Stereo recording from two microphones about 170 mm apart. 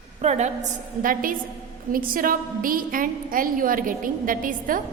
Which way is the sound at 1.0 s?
55° right (ahead or behind).